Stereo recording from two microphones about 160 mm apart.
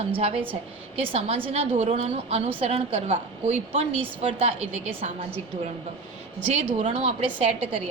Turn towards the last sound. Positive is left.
turn(degrees=-35)  # may be behind; listen again after turning